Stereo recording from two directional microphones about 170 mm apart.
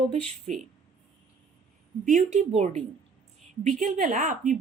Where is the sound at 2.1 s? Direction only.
45° right (ahead or behind).